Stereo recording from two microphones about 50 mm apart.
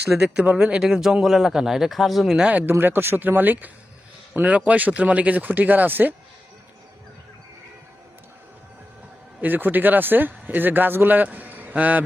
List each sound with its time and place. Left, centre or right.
0.1 s a man's voice: centre
2.5 s speech: right
2.7 s speech: right
9.4 s speech: right